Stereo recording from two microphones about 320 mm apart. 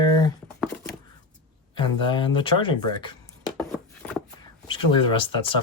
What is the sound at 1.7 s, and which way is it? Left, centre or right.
Speech, centre.